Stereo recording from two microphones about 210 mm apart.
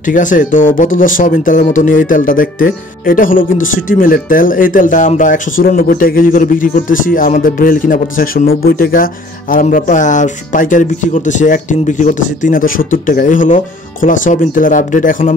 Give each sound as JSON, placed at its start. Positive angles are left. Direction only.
{"t": 0.0, "sound": "speech", "side_deg": 40}